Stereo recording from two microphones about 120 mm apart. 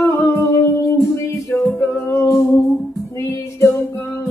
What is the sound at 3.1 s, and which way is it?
Female singing, 25° left (ahead or behind).